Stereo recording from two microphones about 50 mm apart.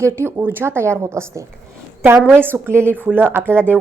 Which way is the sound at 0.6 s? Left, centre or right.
Right.